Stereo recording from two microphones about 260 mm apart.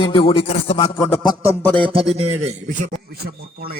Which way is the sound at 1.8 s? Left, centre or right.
Right.